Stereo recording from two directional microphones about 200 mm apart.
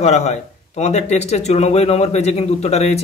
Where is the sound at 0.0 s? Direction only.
35° left (ahead or behind).